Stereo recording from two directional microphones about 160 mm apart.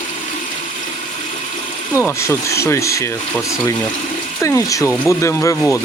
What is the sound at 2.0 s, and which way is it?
Speech, 15° left (ahead or behind).